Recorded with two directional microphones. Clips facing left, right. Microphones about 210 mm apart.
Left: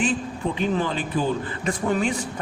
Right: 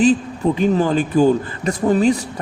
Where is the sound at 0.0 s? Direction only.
40° right (ahead or behind).